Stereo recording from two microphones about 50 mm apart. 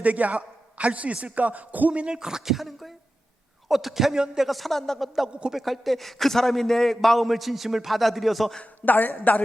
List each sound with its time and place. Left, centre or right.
0.0 s a man's voice: right
1.9 s speech: right
2.1 s a man's voice: centre
8.8 s a man's voice: left